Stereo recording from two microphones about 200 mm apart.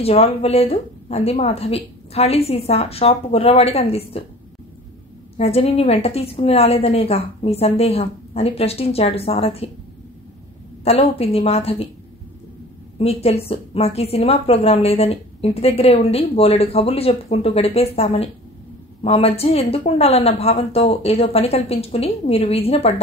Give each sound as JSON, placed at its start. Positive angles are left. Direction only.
{"t": 0.0, "sound": "a woman's voice", "side_deg": 30}
{"t": 5.4, "sound": "a woman's voice", "side_deg": 30}
{"t": 10.8, "sound": "a woman's voice", "side_deg": 30}
{"t": 13.0, "sound": "a woman's voice", "side_deg": 30}